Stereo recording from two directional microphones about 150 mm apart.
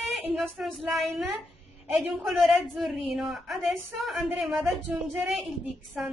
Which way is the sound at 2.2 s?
Centre (ahead or behind).